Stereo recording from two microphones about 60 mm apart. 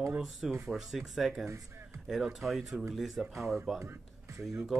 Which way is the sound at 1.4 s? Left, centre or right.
Right.